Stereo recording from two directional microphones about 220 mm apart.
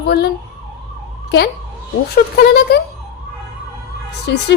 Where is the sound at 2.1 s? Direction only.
45° left (ahead or behind).